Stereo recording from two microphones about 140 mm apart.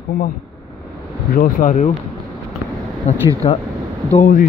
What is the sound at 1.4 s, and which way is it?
Speech, 65° left (ahead or behind).